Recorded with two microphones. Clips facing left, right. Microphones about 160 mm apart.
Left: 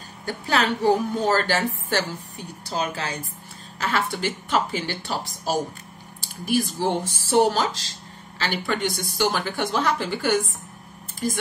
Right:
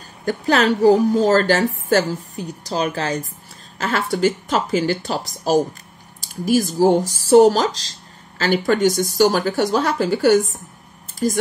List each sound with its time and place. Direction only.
0.2 s a woman's voice: 45° right (ahead or behind)